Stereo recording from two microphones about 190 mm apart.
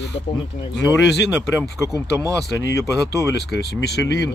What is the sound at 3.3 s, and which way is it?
Speech, 65° left (ahead or behind).